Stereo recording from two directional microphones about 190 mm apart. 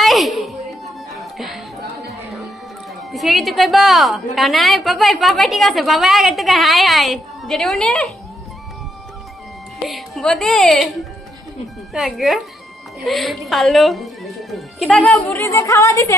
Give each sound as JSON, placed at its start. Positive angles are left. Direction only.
{"t": 0.0, "sound": "a sound", "side_deg": 0}
{"t": 1.1, "sound": "music", "side_deg": 0}
{"t": 3.1, "sound": "a woman's voice", "side_deg": 0}
{"t": 9.8, "sound": "a woman's voice", "side_deg": 0}